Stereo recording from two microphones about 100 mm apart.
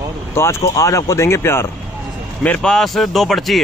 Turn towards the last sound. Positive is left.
turn(degrees=0)  # may be behind; listen again after turning